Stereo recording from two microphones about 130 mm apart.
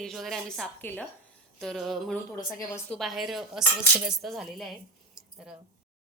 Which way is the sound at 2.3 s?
20° left (ahead or behind).